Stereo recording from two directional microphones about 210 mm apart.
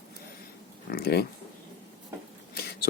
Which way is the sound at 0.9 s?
50° left (ahead or behind).